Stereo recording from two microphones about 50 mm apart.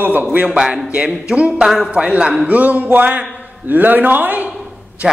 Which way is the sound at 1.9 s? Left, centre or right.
Right.